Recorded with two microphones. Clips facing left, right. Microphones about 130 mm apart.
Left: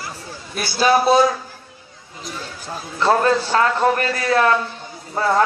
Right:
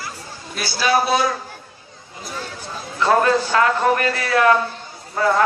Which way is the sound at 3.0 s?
35° left (ahead or behind).